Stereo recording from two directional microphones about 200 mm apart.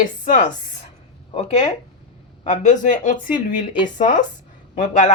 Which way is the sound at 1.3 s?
30° left (ahead or behind).